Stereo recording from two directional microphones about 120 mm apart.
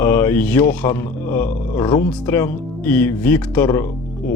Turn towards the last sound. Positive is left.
turn(degrees=15)  # may be behind; listen again after turning